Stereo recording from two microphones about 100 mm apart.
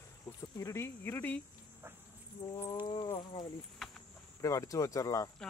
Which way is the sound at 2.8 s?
45° left (ahead or behind).